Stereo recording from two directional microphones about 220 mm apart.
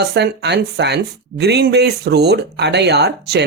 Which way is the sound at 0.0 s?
50° right (ahead or behind).